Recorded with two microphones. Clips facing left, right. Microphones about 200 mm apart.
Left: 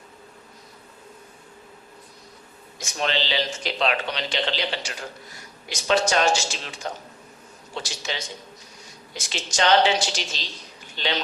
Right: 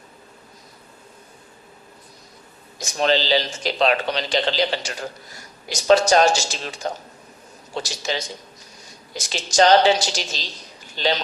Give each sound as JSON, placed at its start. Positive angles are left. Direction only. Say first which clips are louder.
{"t": 2.7, "sound": "a man's voice", "louder": "right 6 dB", "side_deg": -40}